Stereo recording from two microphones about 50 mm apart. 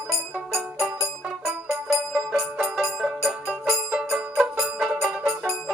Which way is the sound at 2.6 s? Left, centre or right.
Centre.